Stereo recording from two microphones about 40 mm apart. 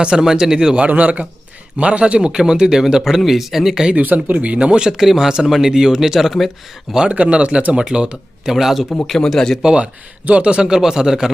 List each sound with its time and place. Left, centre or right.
0.0 s speech: centre
0.8 s speech: right
1.8 s a man's voice: right; by 3.8 s centre
3.9 s speech: right
4.9 s speech: centre
7.1 s a man's voice: right
8.4 s speech: centre
9.0 s a man's voice: centre
9.6 s a man's voice: right